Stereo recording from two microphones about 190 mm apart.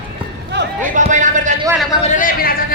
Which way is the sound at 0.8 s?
40° right (ahead or behind).